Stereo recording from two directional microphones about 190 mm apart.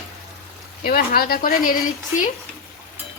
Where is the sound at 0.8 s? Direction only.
50° left (ahead or behind).